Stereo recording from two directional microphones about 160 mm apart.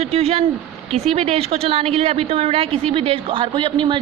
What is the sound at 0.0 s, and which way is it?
A woman's voice, 40° right (ahead or behind).